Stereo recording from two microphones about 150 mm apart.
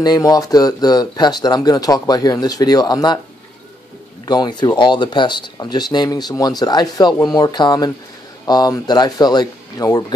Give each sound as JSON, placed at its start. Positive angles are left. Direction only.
{"t": 0.0, "sound": "speech", "side_deg": 25}
{"t": 4.3, "sound": "speech", "side_deg": 30}